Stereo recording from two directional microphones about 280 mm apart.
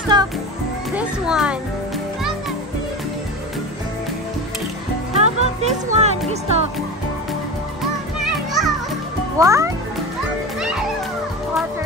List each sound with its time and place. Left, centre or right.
0.1 s music: centre
0.9 s music: centre
5.1 s music: right
8.2 s children playing: centre
9.4 s a child's voice: centre
10.6 s music: centre